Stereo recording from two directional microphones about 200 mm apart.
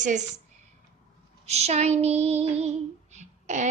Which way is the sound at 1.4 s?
30° right (ahead or behind).